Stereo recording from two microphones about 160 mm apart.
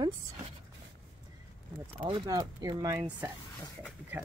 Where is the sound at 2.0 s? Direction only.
25° right (ahead or behind).